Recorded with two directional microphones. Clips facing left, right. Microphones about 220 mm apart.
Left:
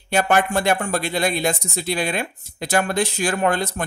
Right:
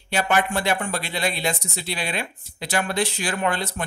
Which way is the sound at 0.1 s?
45° left (ahead or behind).